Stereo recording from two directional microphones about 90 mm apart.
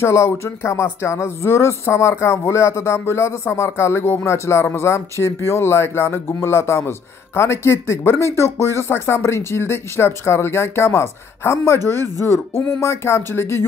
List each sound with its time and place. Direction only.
0.0 s speech: 35° left (ahead or behind)